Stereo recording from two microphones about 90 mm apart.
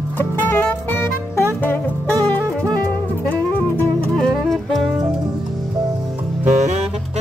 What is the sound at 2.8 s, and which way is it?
Music, 20° left (ahead or behind).